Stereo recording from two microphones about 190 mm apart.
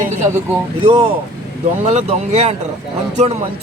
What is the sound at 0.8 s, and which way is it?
A man's voice, 30° right (ahead or behind).